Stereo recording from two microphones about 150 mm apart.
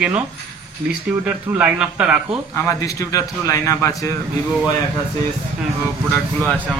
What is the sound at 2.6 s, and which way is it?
A man's voice, 20° left (ahead or behind).